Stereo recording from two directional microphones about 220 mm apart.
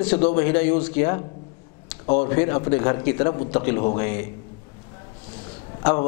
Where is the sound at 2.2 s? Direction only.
15° left (ahead or behind).